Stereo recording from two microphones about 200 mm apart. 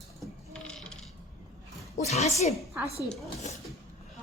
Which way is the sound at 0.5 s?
5° left (ahead or behind).